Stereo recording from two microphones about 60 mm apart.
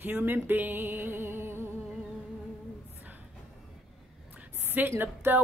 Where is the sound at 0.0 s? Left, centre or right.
Right.